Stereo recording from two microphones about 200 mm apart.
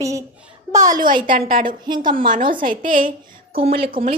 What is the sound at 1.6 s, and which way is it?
Speech, 20° right (ahead or behind).